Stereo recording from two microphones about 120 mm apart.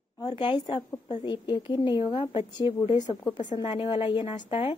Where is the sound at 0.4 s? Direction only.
40° left (ahead or behind).